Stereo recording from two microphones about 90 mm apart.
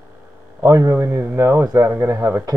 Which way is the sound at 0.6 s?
35° right (ahead or behind).